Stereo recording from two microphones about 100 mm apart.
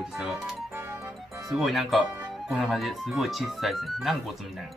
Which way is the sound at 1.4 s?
Centre (ahead or behind).